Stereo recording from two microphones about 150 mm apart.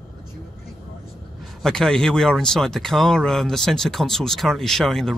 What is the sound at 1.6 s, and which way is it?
Speech, centre (ahead or behind).